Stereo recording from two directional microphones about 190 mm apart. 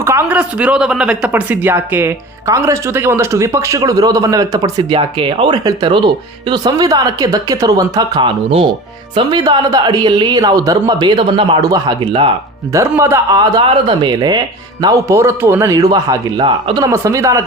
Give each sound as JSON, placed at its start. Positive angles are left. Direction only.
{"t": 0.0, "sound": "speech", "side_deg": -15}
{"t": 12.7, "sound": "speech", "side_deg": -15}